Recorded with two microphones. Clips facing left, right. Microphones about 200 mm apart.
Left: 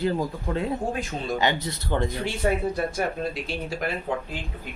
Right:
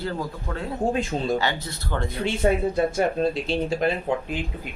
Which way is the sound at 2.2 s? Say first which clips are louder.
Right 3 dB; 25° right (ahead or behind).